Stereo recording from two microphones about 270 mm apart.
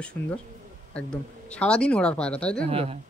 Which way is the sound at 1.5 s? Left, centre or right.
Centre.